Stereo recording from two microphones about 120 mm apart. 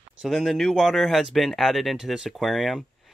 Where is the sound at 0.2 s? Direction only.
Centre (ahead or behind).